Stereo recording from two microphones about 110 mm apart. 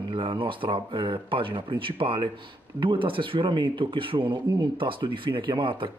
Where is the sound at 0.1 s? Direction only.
50° right (ahead or behind).